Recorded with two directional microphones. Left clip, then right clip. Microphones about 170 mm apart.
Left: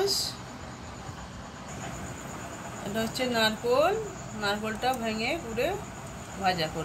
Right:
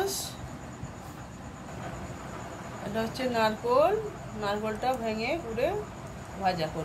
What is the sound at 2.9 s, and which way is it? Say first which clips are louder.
Speech: left 1 dB; 5° right (ahead or behind).